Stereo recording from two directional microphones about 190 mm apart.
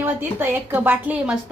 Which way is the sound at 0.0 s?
10° right (ahead or behind).